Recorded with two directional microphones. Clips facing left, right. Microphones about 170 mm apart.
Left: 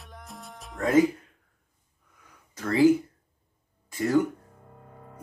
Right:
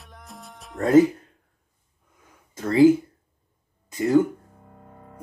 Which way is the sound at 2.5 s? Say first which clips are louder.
Right 5 dB; 25° right (ahead or behind).